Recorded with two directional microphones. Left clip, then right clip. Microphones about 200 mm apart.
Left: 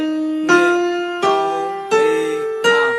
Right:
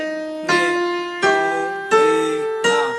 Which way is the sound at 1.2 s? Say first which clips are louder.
Even; 15° left (ahead or behind).